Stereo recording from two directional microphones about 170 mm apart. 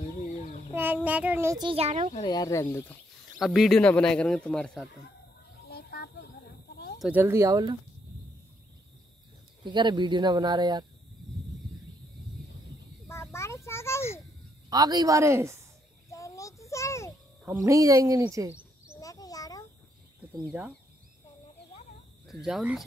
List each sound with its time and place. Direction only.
0.7 s child singing: 10° right (ahead or behind)
1.6 s a child's voice: 35° right (ahead or behind)
2.2 s speech: 20° left (ahead or behind)
3.3 s speech: centre (ahead or behind)
5.7 s a sound: 65° left (ahead or behind)
7.0 s speech: 10° right (ahead or behind)
9.7 s speech: 25° right (ahead or behind)
13.1 s a sound: 15° left (ahead or behind)
14.7 s speech: 25° right (ahead or behind)
16.1 s a sound: 20° left (ahead or behind)
17.6 s speech: 20° right (ahead or behind)
18.9 s a sound: 20° left (ahead or behind)
22.3 s speech: centre (ahead or behind)